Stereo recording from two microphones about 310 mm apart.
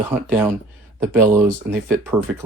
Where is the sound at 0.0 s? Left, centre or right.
Centre.